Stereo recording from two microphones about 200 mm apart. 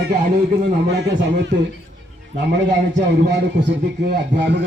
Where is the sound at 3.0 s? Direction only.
60° right (ahead or behind).